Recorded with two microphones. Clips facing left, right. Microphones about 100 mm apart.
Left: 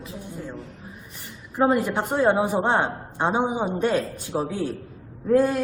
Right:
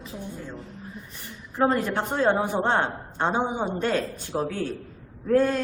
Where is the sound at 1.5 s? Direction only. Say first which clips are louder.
Left 2 dB; 15° left (ahead or behind).